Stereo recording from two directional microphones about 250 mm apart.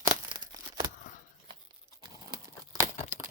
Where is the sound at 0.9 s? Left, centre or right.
Left.